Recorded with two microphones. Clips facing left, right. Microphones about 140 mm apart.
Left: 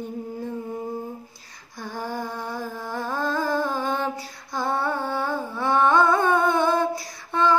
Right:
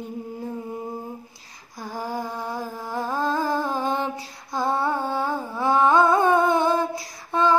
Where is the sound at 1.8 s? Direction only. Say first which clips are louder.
Right 1 dB; 5° right (ahead or behind).